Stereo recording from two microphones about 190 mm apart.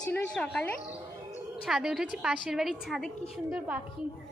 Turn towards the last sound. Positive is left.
turn(degrees=-5)  # may be behind; listen again after turning